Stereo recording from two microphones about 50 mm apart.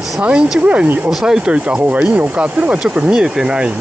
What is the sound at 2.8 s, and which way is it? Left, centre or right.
Speech, centre.